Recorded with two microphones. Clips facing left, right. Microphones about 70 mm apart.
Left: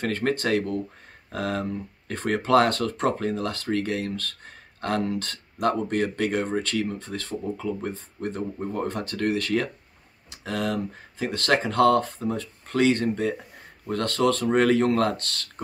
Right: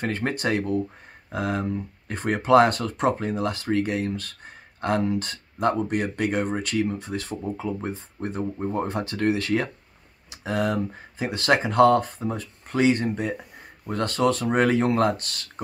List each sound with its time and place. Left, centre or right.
0.0 s speech: centre